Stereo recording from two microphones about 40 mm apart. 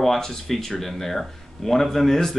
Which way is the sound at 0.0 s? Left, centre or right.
Centre.